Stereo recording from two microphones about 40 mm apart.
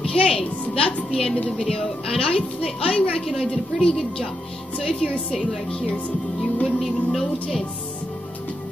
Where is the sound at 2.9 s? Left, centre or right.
Left.